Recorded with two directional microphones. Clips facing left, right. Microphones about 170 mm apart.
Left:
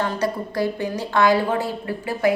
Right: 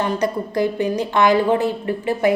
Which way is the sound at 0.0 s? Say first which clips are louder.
Right 3 dB; 20° right (ahead or behind).